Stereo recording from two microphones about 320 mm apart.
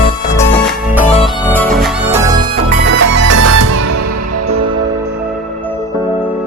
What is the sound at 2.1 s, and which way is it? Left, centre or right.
Music, centre.